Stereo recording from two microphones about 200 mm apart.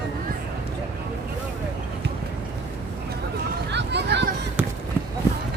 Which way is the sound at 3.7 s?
60° right (ahead or behind).